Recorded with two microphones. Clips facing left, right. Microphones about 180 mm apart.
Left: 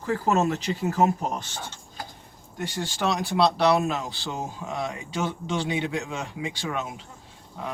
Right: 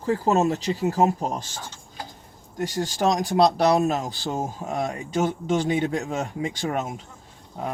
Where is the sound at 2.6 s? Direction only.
40° right (ahead or behind).